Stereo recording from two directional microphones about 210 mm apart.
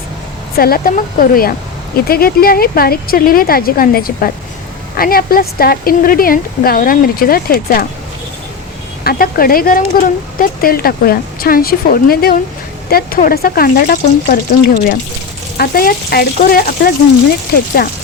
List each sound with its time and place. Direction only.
0.5 s speech: 45° left (ahead or behind)
9.0 s speech: 45° left (ahead or behind)